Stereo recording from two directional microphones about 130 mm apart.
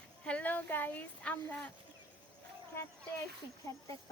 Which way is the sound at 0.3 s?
10° left (ahead or behind).